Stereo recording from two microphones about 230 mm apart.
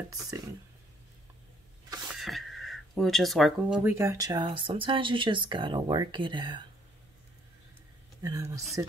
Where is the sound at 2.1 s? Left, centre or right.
Centre.